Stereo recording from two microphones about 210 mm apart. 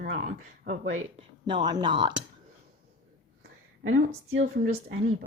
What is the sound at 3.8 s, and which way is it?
Speech, 75° right (ahead or behind).